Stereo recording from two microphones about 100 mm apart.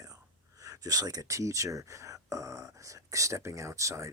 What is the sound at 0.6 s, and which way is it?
Speech, 40° right (ahead or behind).